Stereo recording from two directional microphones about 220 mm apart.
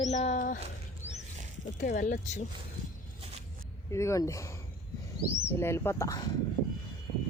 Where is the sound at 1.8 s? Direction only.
40° left (ahead or behind).